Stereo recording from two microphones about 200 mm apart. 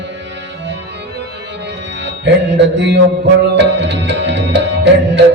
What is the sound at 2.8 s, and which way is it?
Music, 60° right (ahead or behind).